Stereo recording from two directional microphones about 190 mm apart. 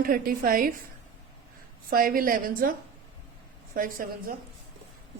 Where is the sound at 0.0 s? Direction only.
50° right (ahead or behind).